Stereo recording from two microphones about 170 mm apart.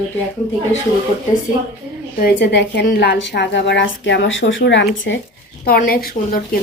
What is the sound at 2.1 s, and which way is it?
A woman's voice, 70° left (ahead or behind).